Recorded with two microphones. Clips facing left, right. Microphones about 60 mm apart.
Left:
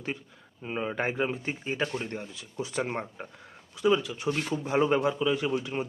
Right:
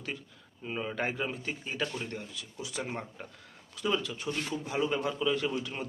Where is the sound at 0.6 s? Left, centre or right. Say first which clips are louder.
Left 3 dB; centre; by 3.1 s left.